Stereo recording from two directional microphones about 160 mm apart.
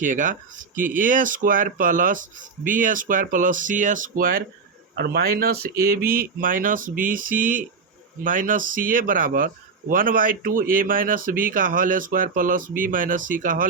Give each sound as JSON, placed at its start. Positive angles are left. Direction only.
{"t": 0.0, "sound": "speech", "side_deg": -55}
{"t": 4.9, "sound": "speech", "side_deg": -80}